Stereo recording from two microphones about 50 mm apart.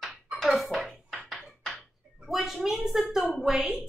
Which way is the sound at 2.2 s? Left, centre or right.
Centre.